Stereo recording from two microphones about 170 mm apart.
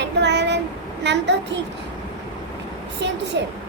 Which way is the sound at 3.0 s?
90° right.